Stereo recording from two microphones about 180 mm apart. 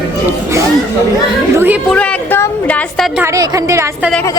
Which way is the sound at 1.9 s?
10° left (ahead or behind).